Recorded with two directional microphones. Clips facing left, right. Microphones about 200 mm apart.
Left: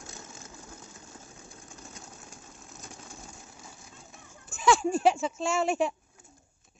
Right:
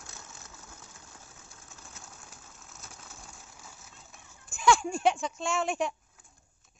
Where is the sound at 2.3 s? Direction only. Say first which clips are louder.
Left 4 dB; 15° left (ahead or behind).